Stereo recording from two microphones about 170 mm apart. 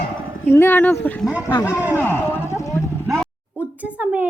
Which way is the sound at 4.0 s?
10° right (ahead or behind).